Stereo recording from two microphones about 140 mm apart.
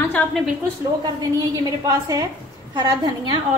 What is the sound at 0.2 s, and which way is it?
Speech, 15° left (ahead or behind).